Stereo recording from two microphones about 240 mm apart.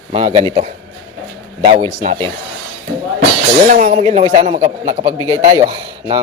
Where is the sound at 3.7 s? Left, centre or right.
Right.